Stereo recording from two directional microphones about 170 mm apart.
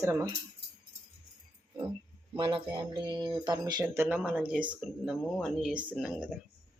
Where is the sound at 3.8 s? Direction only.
15° right (ahead or behind).